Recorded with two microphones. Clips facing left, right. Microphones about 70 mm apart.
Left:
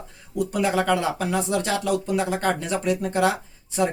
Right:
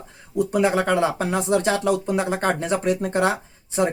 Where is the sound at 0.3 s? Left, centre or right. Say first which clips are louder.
Right 3 dB; right.